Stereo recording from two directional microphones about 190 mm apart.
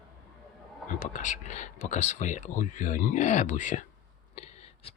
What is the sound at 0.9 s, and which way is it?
Speech, 40° left (ahead or behind).